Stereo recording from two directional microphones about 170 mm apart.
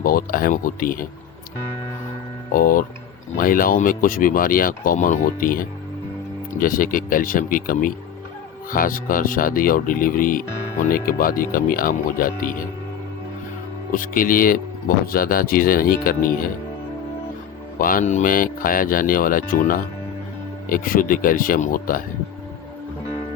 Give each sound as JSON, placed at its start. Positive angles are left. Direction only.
{"t": 0.0, "sound": "speech", "side_deg": 55}
{"t": 2.5, "sound": "speech", "side_deg": 55}
{"t": 13.9, "sound": "speech", "side_deg": 55}
{"t": 17.7, "sound": "speech", "side_deg": 55}